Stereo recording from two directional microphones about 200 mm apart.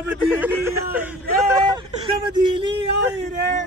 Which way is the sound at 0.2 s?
10° right (ahead or behind).